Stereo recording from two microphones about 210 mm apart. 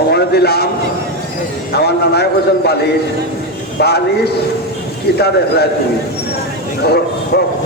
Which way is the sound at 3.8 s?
50° left (ahead or behind).